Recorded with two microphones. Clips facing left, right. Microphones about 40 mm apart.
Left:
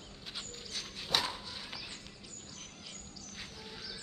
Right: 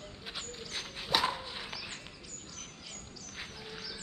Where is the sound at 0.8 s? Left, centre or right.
Centre.